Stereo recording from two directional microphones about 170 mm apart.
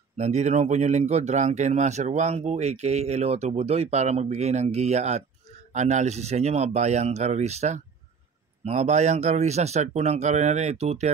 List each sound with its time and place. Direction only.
0.2 s speech: 40° right (ahead or behind)